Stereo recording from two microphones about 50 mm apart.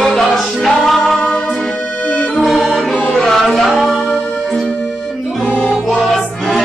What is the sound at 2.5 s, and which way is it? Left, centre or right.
Music, centre.